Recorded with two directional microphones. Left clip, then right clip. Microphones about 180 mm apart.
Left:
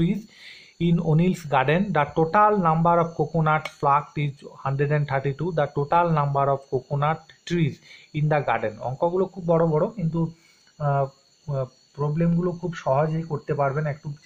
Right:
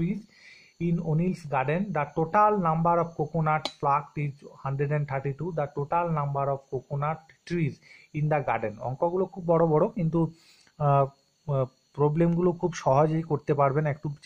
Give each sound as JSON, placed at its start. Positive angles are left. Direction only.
{"t": 0.0, "sound": "speech", "side_deg": 0}
{"t": 9.6, "sound": "speech", "side_deg": -35}